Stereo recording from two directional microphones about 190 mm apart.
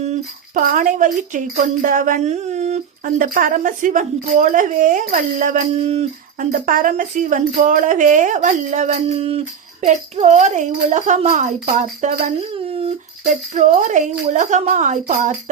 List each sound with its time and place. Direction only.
0.5 s a woman's voice: 45° right (ahead or behind)